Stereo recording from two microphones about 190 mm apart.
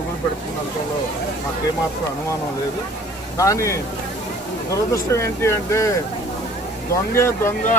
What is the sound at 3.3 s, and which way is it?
Speech, 15° left (ahead or behind).